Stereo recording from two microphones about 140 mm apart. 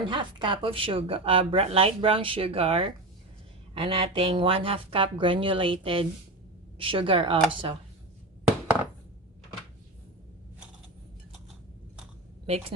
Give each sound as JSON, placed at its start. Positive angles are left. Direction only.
{"t": 0.0, "sound": "speech", "side_deg": -35}
{"t": 12.5, "sound": "a woman's voice", "side_deg": -50}